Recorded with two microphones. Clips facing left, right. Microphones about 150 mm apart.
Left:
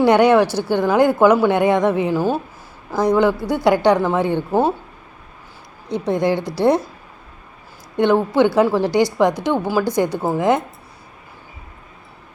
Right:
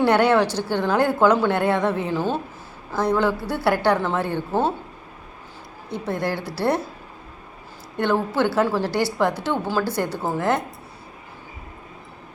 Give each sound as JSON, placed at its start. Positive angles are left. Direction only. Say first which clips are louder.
{"t": 0.0, "sound": "a woman's voice", "louder": "left 5 dB", "side_deg": 15}
{"t": 5.9, "sound": "a woman's voice", "louder": "left 7 dB", "side_deg": 20}
{"t": 7.9, "sound": "a woman's voice", "louder": "left 6 dB", "side_deg": 15}